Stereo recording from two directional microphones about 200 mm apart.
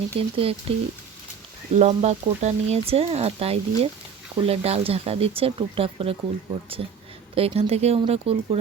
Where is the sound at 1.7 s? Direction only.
35° right (ahead or behind).